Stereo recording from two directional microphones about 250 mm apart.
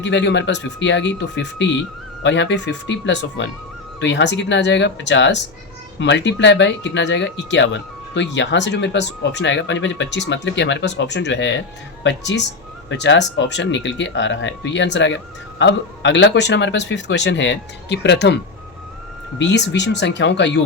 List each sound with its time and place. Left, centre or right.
0.0 s speech: left
19.4 s speech: left